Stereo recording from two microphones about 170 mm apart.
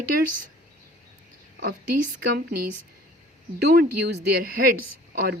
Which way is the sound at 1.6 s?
60° right (ahead or behind).